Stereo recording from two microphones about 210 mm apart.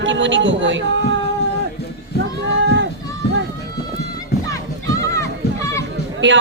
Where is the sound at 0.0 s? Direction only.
60° right (ahead or behind).